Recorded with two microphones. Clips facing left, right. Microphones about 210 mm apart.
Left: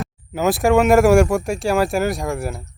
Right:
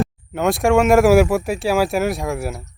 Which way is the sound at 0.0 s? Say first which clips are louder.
Right 1 dB; centre (ahead or behind).